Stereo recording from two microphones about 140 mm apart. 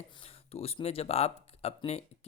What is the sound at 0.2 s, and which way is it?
Speech, 45° left (ahead or behind).